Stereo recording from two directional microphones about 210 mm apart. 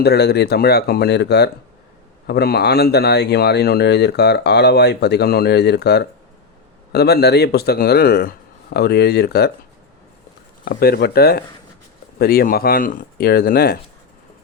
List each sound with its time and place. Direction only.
0.0 s speech: 50° left (ahead or behind)
10.7 s speech: 45° left (ahead or behind)